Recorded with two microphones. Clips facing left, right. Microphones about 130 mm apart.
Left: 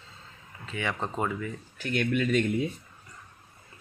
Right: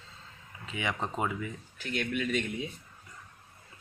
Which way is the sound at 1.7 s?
45° left (ahead or behind).